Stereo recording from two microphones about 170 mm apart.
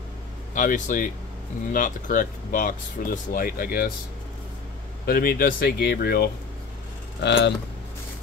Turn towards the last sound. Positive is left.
turn(degrees=90)